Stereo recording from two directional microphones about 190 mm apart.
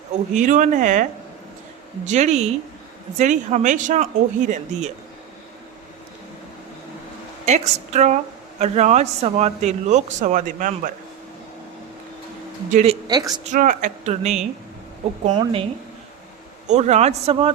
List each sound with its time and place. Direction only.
0.3 s a woman's voice: 40° right (ahead or behind)
2.0 s a woman's voice: 35° right (ahead or behind)
7.4 s a woman's voice: 35° right (ahead or behind)
12.7 s speech: 35° right (ahead or behind)
13.1 s speech: 20° right (ahead or behind)
13.4 s a woman's voice: 40° right (ahead or behind)
16.6 s a woman's voice: 35° right (ahead or behind)